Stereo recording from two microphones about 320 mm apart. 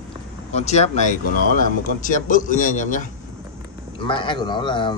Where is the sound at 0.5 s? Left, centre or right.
Left.